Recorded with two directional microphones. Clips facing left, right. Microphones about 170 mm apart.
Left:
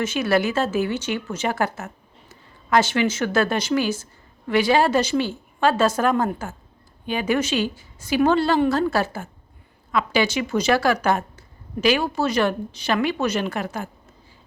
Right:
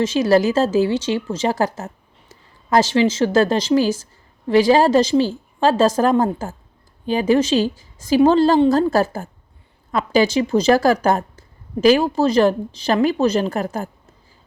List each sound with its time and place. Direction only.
0.0 s a woman's voice: 35° right (ahead or behind)
2.9 s a woman's voice: 30° right (ahead or behind)